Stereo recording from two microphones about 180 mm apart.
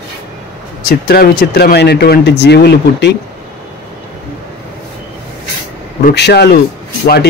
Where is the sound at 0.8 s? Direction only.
60° left (ahead or behind).